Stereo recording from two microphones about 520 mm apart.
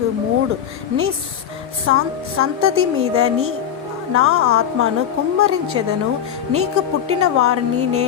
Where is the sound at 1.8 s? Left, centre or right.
Right.